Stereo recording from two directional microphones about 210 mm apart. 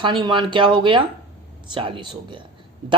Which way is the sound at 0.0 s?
20° right (ahead or behind).